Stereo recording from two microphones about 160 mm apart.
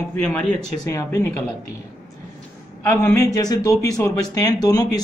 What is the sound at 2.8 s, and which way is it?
Speech, 20° left (ahead or behind).